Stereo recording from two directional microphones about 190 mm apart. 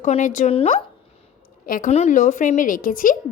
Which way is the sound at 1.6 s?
45° left (ahead or behind).